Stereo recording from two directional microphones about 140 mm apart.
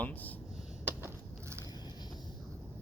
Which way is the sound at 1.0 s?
15° right (ahead or behind).